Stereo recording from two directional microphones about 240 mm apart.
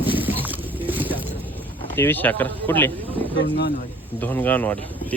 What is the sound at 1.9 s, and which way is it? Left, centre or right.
Speech, centre.